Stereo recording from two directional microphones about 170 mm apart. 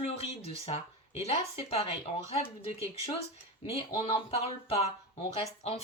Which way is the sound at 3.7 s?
35° left (ahead or behind).